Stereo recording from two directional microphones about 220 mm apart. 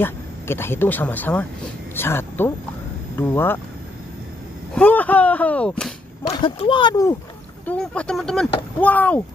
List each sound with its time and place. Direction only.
0.0 s speech: 10° left (ahead or behind)
4.7 s speech: 5° left (ahead or behind)
6.2 s speech: 25° left (ahead or behind)
7.6 s speech: 5° left (ahead or behind)